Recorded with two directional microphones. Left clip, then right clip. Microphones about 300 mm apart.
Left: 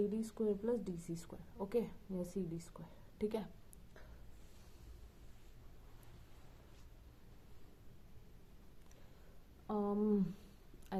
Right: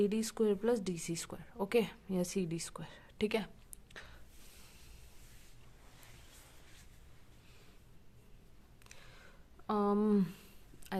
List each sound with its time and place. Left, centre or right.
0.0 s a woman's voice: right
9.6 s a woman's voice: right